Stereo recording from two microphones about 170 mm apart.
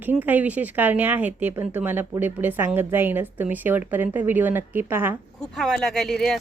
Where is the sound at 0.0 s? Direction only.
10° right (ahead or behind).